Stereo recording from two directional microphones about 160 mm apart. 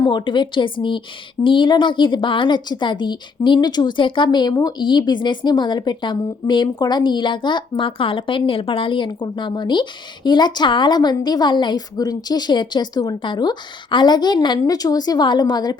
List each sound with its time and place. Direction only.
0.0 s a woman's voice: 30° left (ahead or behind)